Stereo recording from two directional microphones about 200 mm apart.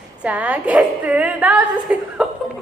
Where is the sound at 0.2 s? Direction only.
5° right (ahead or behind).